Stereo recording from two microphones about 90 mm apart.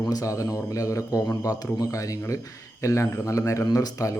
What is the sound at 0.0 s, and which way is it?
Speech, 45° left (ahead or behind).